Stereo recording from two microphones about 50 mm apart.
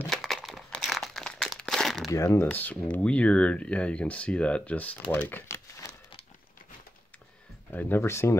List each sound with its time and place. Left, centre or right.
0.1 s crumpling: centre
1.1 s crumpling: centre
2.1 s speech: left
2.5 s speech: left
7.7 s speech: left
8.1 s speech: left